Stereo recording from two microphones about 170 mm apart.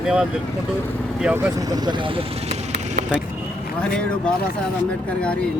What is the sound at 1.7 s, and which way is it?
Speech, 25° right (ahead or behind).